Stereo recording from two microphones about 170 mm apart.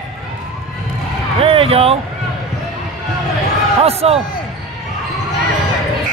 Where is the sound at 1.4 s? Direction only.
35° right (ahead or behind).